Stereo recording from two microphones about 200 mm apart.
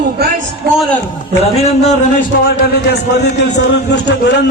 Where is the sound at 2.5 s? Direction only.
55° left (ahead or behind).